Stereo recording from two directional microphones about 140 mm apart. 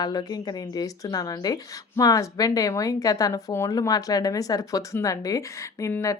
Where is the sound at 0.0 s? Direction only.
30° left (ahead or behind).